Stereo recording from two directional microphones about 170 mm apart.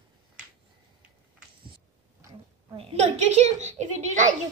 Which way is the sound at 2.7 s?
40° right (ahead or behind).